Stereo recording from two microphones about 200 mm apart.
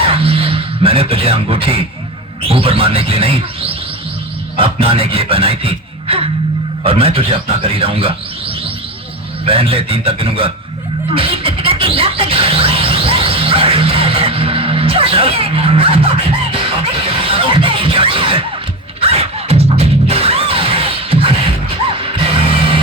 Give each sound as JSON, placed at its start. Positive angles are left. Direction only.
{"t": 0.0, "sound": "a sound", "side_deg": -30}
{"t": 2.4, "sound": "speech", "side_deg": -30}
{"t": 11.1, "sound": "music", "side_deg": -30}